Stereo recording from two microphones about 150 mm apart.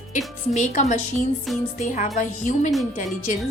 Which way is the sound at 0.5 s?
55° left (ahead or behind).